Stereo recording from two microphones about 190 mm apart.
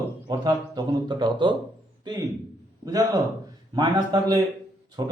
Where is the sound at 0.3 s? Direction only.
20° right (ahead or behind).